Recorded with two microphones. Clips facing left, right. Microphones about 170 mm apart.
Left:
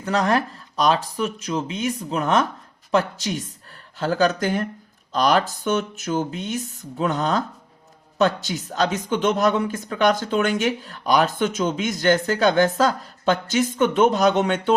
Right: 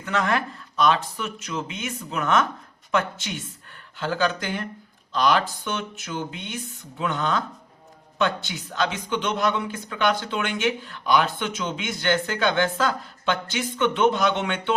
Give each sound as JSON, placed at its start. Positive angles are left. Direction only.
{"t": 0.0, "sound": "speech", "side_deg": 35}